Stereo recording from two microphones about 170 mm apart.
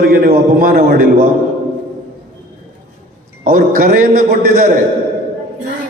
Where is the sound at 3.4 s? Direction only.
55° right (ahead or behind).